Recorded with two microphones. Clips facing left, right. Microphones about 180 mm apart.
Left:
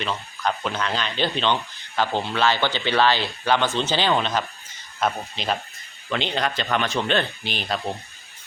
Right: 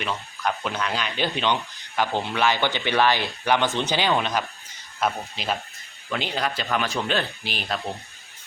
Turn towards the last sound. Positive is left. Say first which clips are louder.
# left 2 dB
turn(degrees=-5)  # may be behind; listen again after turning